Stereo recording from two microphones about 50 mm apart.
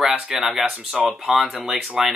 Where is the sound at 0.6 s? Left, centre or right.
Right.